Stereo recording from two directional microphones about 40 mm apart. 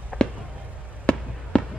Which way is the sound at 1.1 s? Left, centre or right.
Left.